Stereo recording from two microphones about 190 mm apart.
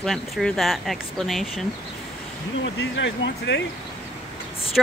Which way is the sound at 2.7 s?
70° left (ahead or behind).